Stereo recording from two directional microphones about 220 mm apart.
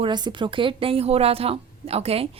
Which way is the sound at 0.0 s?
20° right (ahead or behind).